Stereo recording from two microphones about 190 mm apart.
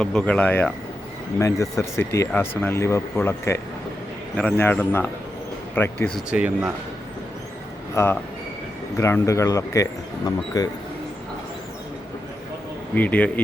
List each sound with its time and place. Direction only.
0.0 s speech: 5° left (ahead or behind)
7.9 s speech: 10° left (ahead or behind)
12.9 s speech: 10° left (ahead or behind)